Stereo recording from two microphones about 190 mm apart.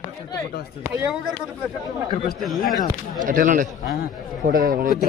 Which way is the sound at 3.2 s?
45° right (ahead or behind).